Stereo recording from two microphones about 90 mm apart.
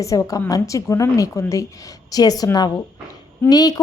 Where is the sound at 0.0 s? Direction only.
35° left (ahead or behind).